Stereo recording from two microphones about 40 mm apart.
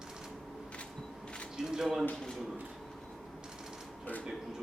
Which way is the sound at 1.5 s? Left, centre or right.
Centre.